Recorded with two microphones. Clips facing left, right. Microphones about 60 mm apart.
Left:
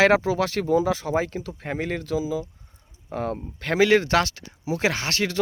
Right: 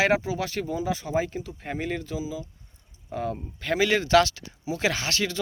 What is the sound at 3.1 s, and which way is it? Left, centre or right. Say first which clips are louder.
Speech: left 2 dB; left.